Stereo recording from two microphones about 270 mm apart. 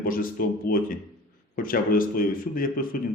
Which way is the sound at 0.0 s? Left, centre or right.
Left.